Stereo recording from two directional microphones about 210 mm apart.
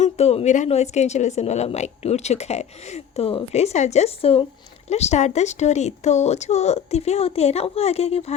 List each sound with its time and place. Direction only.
0.0 s speech: 30° left (ahead or behind)